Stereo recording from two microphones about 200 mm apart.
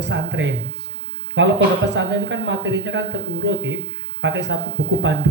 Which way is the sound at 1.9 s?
65° right (ahead or behind).